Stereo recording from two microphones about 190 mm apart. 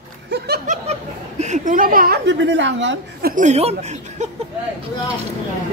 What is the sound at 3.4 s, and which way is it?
Speech, 35° right (ahead or behind).